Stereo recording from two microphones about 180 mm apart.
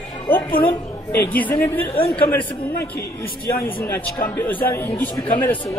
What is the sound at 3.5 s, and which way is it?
A man's voice, 10° left (ahead or behind).